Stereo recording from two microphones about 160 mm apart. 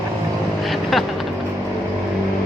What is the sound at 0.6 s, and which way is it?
Vehicle, centre (ahead or behind).